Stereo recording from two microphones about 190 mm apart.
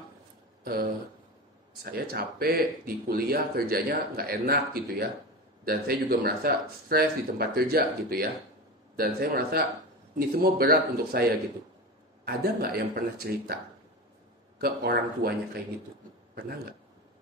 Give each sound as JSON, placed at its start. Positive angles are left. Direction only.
{"t": 1.9, "sound": "speech", "side_deg": -55}
{"t": 12.3, "sound": "speech", "side_deg": -55}
{"t": 14.6, "sound": "speech", "side_deg": -55}